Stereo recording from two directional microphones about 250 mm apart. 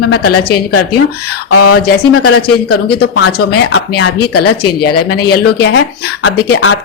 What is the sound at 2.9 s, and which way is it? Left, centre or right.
Speech, left.